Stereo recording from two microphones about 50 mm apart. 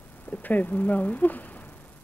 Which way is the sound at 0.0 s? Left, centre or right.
Left.